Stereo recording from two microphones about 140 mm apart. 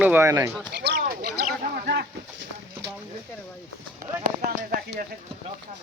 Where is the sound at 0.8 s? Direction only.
85° right.